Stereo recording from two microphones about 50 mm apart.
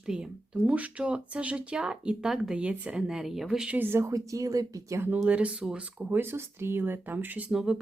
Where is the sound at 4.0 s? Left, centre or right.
Right.